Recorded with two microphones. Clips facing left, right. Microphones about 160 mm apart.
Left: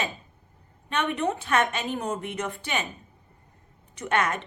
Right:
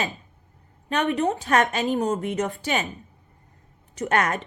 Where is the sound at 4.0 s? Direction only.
40° right (ahead or behind).